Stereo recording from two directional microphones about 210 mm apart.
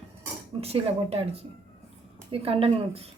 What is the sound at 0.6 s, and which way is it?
A woman's voice, 30° right (ahead or behind).